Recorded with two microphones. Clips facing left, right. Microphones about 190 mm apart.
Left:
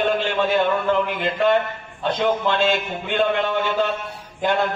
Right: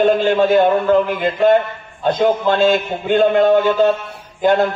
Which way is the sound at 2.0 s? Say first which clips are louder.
Right 5 dB; 40° right (ahead or behind).